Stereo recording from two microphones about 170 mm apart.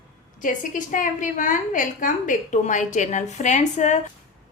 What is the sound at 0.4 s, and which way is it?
A woman's voice, 50° left (ahead or behind).